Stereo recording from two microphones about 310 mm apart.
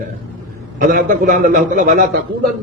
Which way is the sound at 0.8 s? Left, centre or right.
Right.